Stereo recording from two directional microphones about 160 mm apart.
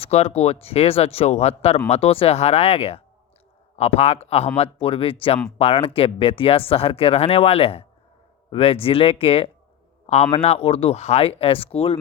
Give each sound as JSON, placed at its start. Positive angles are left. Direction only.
{"t": 0.0, "sound": "speech", "side_deg": 40}